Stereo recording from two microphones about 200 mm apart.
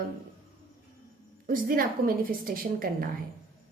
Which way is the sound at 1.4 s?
45° right (ahead or behind).